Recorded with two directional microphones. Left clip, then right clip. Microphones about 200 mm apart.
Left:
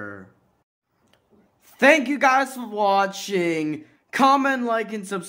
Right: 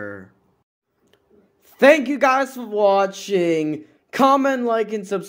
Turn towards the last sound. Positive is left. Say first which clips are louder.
# right 4 dB
turn(degrees=-5)  # may be behind; listen again after turning